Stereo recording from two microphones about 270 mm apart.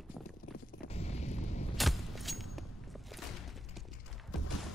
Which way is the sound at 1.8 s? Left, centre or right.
Centre.